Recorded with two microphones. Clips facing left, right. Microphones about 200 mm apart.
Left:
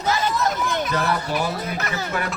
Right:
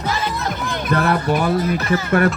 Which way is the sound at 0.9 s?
55° right (ahead or behind).